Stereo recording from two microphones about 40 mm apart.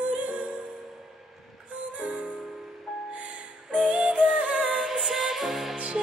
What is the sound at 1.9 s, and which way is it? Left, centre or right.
Music, right.